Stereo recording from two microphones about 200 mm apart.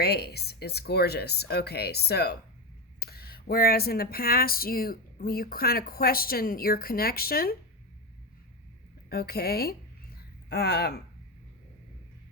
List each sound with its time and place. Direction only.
0.0 s speech: 55° left (ahead or behind)
9.0 s speech: 50° left (ahead or behind)